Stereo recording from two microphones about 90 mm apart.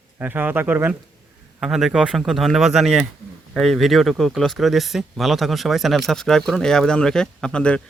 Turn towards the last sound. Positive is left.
turn(degrees=10)  # may be behind; listen again after turning